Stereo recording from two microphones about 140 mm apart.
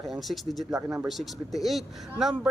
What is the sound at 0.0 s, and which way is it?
Speech, centre (ahead or behind).